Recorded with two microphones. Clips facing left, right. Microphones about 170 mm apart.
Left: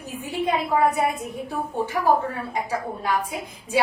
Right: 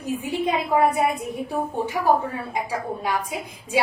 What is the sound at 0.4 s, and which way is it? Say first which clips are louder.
Speech: even; 10° right (ahead or behind).